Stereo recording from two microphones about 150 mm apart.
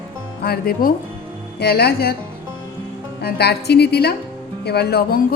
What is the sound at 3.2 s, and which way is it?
Speech, 90° left.